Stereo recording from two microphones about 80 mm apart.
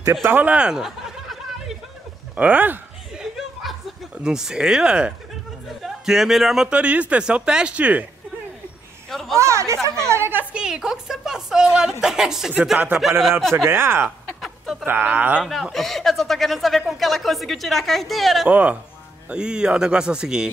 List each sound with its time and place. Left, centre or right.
0.0 s speech: right
0.3 s speech: centre
2.3 s speech: right
3.2 s chuckle: centre
4.2 s speech: centre
9.1 s a sound: centre
9.4 s a sound: right
10.5 s speech: centre
12.7 s speech: centre
13.7 s speech: right
14.0 s a sound: centre
14.9 s speech: right
15.4 s speech: centre
18.5 s speech: centre